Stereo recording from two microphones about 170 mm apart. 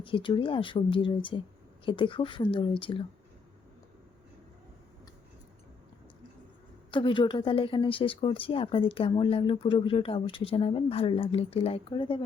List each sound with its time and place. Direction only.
0.0 s speech: 30° left (ahead or behind)
6.9 s speech: 30° left (ahead or behind)